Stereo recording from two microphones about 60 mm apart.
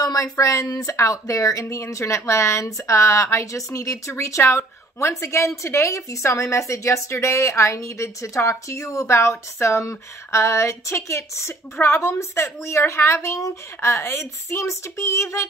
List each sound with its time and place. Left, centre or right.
0.0 s speech: left
0.9 s speech: left